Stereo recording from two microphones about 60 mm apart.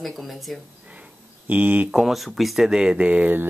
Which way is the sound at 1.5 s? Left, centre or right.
Right.